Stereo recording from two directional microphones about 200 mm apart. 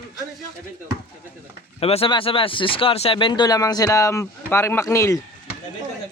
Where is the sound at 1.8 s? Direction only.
30° left (ahead or behind); by 5.2 s 15° left (ahead or behind).